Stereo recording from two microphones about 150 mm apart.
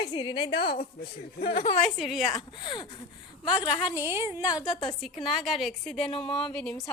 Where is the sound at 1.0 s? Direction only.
80° left.